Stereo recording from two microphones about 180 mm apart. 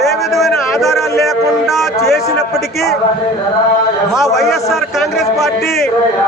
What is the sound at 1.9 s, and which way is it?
Speech, 15° left (ahead or behind).